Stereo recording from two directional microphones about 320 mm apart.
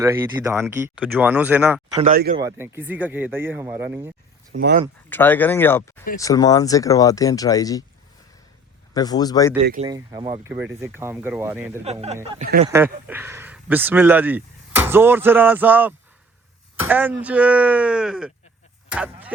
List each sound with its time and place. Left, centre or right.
0.0 s speech: centre
2.0 s speech: right
2.4 s speech: centre
4.5 s speech: right
5.0 s speech: centre
8.9 s speech: centre
9.8 s speech: centre
11.9 s speech: centre
12.6 s speech: centre